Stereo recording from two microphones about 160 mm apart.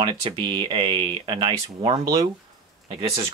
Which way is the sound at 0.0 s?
25° right (ahead or behind).